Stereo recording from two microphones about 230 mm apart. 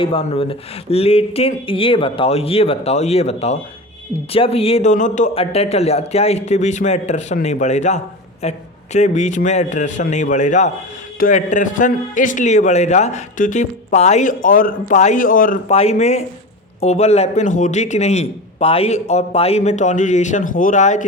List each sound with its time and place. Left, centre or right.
0.0 s a man's voice: left